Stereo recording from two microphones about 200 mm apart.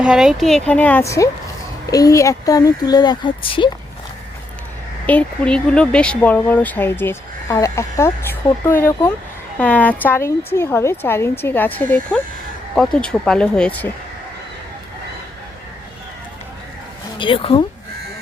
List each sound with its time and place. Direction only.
0.0 s speech: 5° right (ahead or behind); by 3.7 s 25° left (ahead or behind)
5.0 s speech: 5° left (ahead or behind)
17.2 s speech: 25° left (ahead or behind)